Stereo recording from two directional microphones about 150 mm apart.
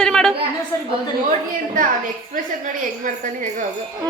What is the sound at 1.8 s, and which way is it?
Speech, 65° right (ahead or behind).